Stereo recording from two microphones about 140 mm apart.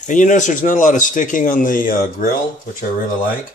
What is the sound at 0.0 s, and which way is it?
Speech, 60° left (ahead or behind).